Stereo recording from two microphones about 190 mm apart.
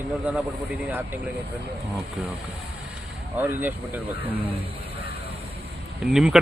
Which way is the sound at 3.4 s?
10° right (ahead or behind).